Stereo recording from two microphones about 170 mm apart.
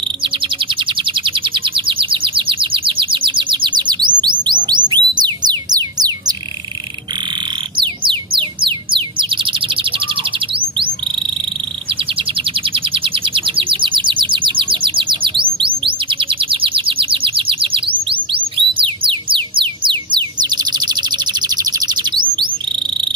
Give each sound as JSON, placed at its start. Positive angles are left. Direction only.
{"t": 0.7, "sound": "bird", "side_deg": -30}
{"t": 7.8, "sound": "bird", "side_deg": -30}
{"t": 11.9, "sound": "chirp", "side_deg": -30}